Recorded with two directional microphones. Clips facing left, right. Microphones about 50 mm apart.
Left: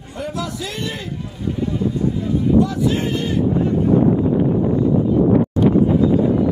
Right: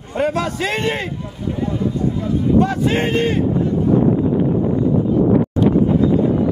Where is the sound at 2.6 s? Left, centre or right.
Right.